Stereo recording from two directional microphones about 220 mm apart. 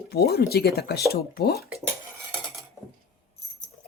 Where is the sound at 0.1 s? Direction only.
45° left (ahead or behind).